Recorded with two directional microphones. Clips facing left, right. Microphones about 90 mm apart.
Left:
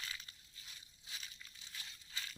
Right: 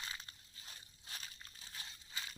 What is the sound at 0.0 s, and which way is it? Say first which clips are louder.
Crushing: right 1 dB; 30° right (ahead or behind).